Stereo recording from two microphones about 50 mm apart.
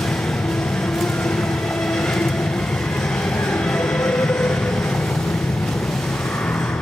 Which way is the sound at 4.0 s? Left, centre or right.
Centre.